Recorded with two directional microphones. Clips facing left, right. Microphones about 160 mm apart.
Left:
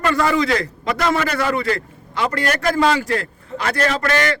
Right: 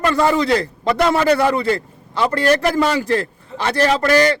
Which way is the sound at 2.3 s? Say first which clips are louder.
Right 4 dB; 30° right (ahead or behind).